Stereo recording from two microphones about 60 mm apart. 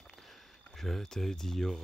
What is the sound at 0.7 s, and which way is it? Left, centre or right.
Speech, centre.